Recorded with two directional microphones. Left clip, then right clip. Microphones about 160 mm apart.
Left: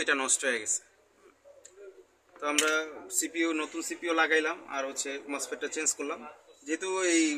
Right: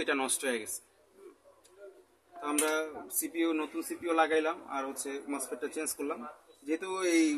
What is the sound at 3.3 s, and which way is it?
Speech, 40° right (ahead or behind).